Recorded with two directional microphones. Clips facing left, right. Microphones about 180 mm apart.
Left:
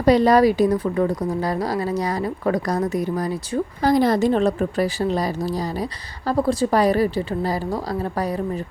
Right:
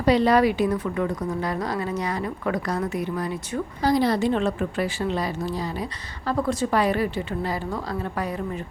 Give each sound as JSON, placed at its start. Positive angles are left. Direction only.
{"t": 0.0, "sound": "speech", "side_deg": 45}
{"t": 3.8, "sound": "speech", "side_deg": 50}